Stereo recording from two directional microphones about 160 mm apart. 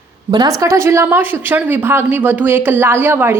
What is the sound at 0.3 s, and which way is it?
A woman's voice, 25° right (ahead or behind).